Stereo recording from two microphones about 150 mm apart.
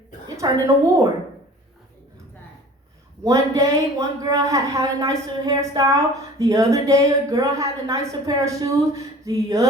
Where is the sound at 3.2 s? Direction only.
20° right (ahead or behind).